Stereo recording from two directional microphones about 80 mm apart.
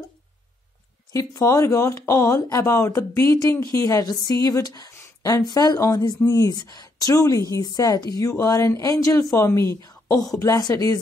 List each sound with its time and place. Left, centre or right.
1.1 s speech: left
5.0 s a sound: left
5.5 s speech: left
6.5 s speech: left
9.8 s a sound: left
10.4 s speech: left